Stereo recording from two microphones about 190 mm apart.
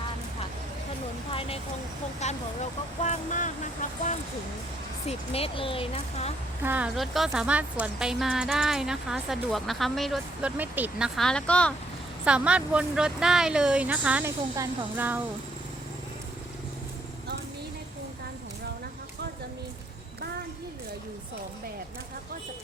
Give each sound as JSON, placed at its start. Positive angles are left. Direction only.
{"t": 1.3, "sound": "speech", "side_deg": 30}
{"t": 6.6, "sound": "speech", "side_deg": -10}
{"t": 12.2, "sound": "speech", "side_deg": -5}